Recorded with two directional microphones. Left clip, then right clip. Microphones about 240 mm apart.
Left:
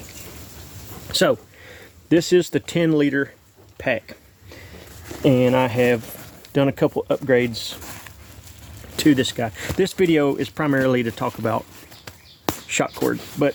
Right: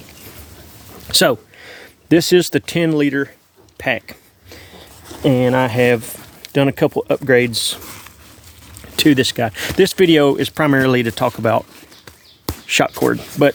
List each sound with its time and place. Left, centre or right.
1.0 s speech: right
3.8 s a sound: right
5.2 s speech: right
6.4 s speech: right
7.9 s a sound: centre
9.0 s speech: right
12.6 s speech: right
13.0 s speech: right